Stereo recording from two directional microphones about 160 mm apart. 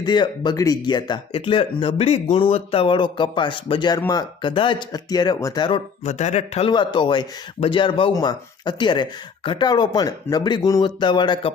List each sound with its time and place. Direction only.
0.0 s a man's voice: 25° left (ahead or behind)
6.1 s a man's voice: 45° left (ahead or behind); by 11.5 s 30° left (ahead or behind)